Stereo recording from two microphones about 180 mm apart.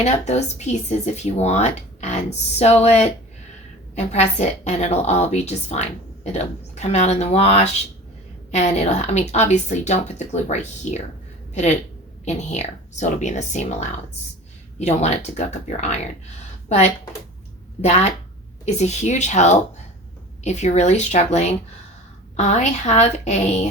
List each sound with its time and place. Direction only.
0.0 s speech: 40° left (ahead or behind)
12.2 s speech: 40° left (ahead or behind)